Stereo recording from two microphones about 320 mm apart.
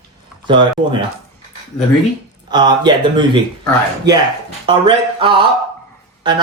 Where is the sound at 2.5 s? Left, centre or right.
Centre.